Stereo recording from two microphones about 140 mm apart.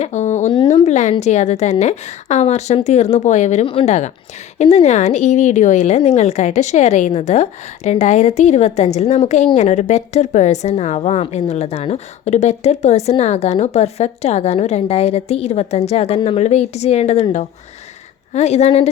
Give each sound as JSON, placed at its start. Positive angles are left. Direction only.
{"t": 0.0, "sound": "a sound", "side_deg": 55}
{"t": 1.2, "sound": "a woman's voice", "side_deg": 55}
{"t": 18.3, "sound": "speech", "side_deg": 50}